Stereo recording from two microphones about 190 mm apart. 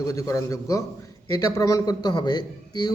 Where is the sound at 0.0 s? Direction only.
15° left (ahead or behind).